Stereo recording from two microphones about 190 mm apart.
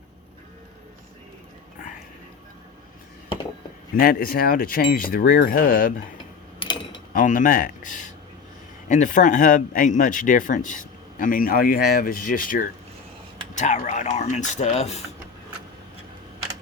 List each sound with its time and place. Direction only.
3.9 s speech: 50° left (ahead or behind)
6.6 s a sound: 25° left (ahead or behind)
7.1 s speech: 45° left (ahead or behind)